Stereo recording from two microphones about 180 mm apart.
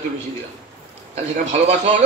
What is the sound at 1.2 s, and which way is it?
Speech, 40° right (ahead or behind).